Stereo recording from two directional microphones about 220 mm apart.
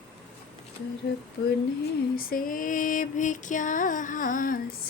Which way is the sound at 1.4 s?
55° left (ahead or behind).